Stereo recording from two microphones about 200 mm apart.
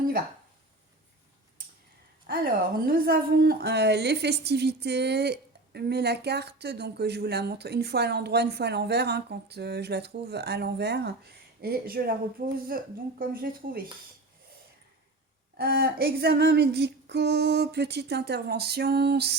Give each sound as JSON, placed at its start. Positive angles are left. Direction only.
{"t": 2.2, "sound": "a woman's voice", "side_deg": -45}
{"t": 15.5, "sound": "a woman's voice", "side_deg": -50}